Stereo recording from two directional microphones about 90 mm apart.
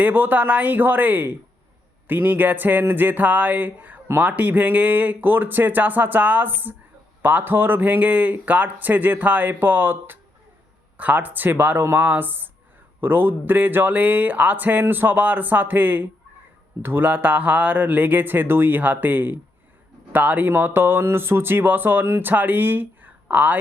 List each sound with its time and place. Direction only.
0.0 s speech: 20° right (ahead or behind)